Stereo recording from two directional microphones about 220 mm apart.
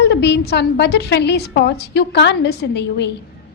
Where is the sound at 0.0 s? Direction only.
50° left (ahead or behind).